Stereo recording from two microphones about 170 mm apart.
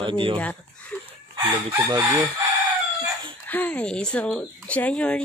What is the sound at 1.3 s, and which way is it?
Chicken, 25° right (ahead or behind).